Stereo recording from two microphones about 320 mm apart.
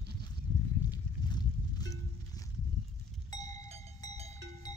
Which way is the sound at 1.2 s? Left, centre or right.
Centre.